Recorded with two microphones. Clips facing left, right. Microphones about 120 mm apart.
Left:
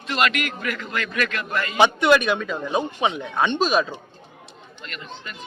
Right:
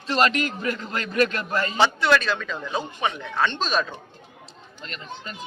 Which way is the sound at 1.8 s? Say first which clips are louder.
Left 4 dB; 15° left (ahead or behind).